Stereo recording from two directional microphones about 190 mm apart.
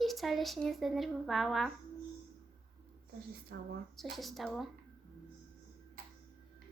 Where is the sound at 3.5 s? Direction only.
55° right (ahead or behind).